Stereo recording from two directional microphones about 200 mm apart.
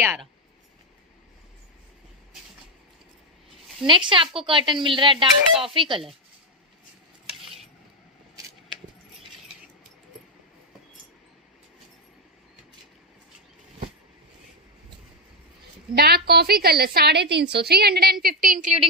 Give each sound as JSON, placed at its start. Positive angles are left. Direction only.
{"t": 0.0, "sound": "speech", "side_deg": -10}
{"t": 3.8, "sound": "speech", "side_deg": -25}
{"t": 16.0, "sound": "a woman's voice", "side_deg": -55}